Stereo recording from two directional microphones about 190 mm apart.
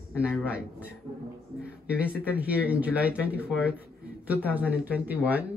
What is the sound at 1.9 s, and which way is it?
Speech, 5° right (ahead or behind).